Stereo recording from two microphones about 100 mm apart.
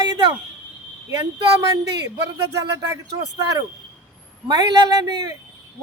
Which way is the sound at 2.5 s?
35° right (ahead or behind).